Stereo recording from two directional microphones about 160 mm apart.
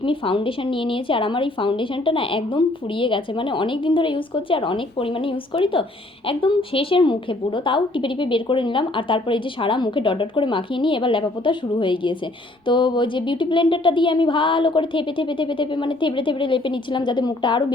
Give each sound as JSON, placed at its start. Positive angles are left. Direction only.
{"t": 0.0, "sound": "a woman's voice", "side_deg": 35}